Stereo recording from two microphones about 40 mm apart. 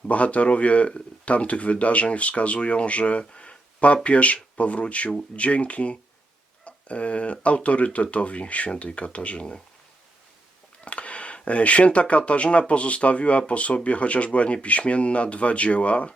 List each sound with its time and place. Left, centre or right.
0.1 s speech: left
10.8 s a sound: left
11.4 s speech: left